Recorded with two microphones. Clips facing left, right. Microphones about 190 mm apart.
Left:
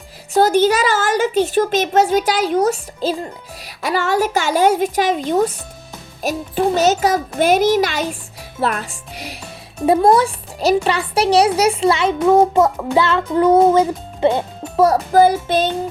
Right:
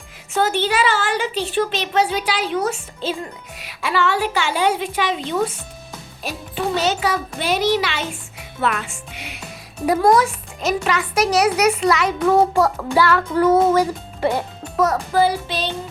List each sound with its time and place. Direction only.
0.3 s a child's voice: 40° left (ahead or behind)